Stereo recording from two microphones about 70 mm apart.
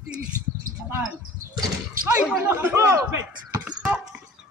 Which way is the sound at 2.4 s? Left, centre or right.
Right.